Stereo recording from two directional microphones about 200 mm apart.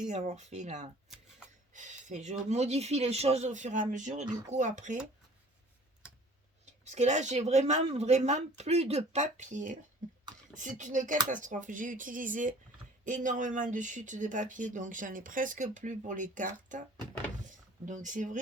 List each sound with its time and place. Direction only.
0.1 s speech: 35° right (ahead or behind)
6.8 s speech: 35° right (ahead or behind)
17.8 s speech: 40° right (ahead or behind)